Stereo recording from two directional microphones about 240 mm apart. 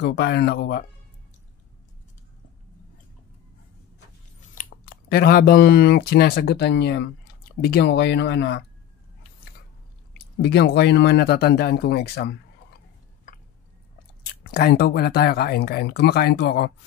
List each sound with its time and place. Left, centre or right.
0.0 s speech: left
4.6 s speech: left
10.4 s speech: left
14.4 s speech: left